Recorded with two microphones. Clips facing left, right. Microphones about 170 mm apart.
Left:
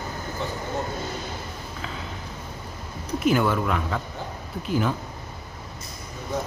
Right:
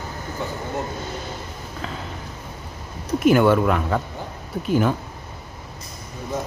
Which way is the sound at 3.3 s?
55° right (ahead or behind).